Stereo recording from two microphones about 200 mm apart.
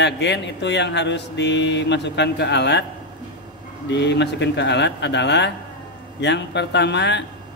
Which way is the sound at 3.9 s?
60° left (ahead or behind).